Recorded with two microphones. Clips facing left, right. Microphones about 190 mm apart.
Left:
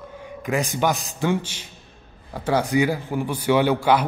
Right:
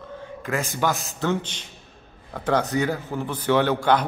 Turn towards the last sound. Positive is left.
turn(degrees=10)  # may be behind; listen again after turning